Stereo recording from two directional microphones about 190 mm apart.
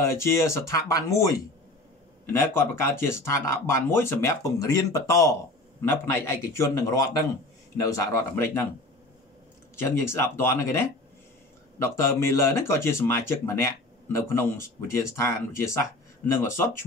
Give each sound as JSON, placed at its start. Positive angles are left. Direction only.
{"t": 0.0, "sound": "speech", "side_deg": 15}
{"t": 9.8, "sound": "speech", "side_deg": 15}